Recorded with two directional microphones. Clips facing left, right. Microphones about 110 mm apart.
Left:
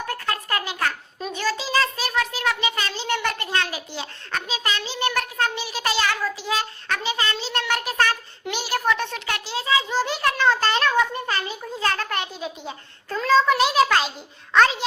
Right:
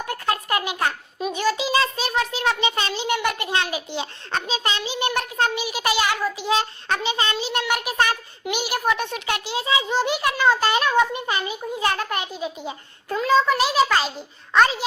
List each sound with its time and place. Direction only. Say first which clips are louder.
0.1 s a child's voice: right 4 dB; 15° right (ahead or behind)